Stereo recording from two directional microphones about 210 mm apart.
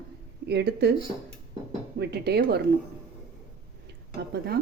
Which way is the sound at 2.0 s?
50° right (ahead or behind).